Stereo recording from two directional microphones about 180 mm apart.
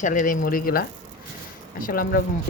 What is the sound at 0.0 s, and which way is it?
Speech, 45° left (ahead or behind).